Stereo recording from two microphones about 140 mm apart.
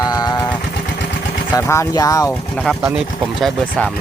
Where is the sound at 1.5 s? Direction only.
20° left (ahead or behind).